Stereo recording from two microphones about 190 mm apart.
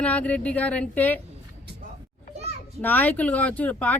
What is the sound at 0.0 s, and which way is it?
Speech, 5° left (ahead or behind).